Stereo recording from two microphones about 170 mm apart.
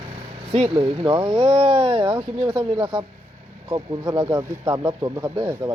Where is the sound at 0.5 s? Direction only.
35° right (ahead or behind).